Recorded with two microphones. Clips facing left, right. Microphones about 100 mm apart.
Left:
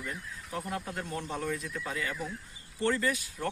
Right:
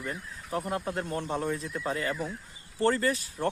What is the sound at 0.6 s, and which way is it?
Speech, 30° right (ahead or behind).